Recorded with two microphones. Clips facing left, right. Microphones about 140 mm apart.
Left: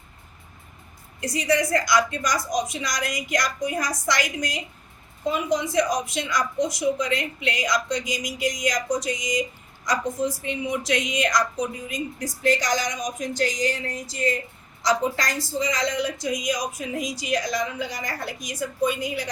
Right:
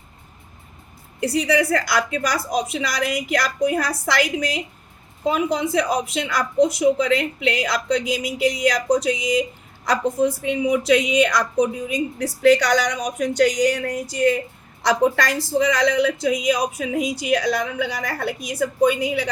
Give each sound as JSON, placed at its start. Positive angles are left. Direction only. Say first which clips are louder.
{"t": 1.2, "sound": "a woman's voice", "louder": "right 4 dB", "side_deg": -65}